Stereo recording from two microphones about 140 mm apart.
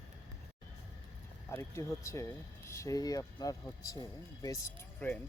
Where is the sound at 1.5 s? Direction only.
20° left (ahead or behind).